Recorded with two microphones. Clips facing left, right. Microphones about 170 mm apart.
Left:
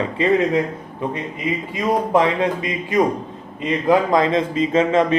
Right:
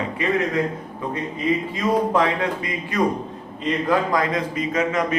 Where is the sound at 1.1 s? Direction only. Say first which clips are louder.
Right 5 dB; 20° left (ahead or behind).